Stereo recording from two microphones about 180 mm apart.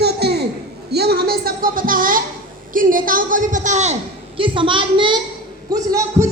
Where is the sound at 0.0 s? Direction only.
65° right (ahead or behind).